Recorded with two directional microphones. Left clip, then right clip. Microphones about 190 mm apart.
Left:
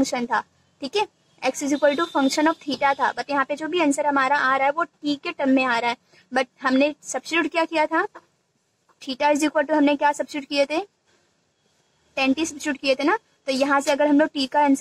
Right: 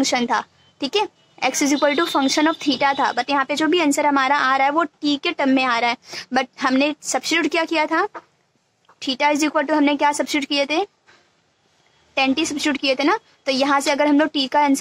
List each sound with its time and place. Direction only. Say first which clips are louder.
0.0 s a woman's voice: right 4 dB; 30° right (ahead or behind)
12.1 s a woman's voice: right 3 dB; 30° right (ahead or behind)